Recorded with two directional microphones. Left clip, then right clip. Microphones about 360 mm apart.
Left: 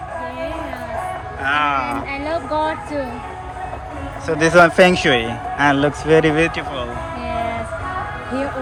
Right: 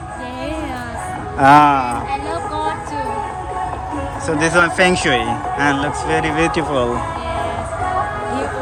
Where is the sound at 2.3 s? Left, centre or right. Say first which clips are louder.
Left 1 dB; centre.